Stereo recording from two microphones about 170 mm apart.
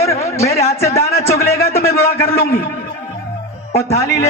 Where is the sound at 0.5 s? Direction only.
40° left (ahead or behind).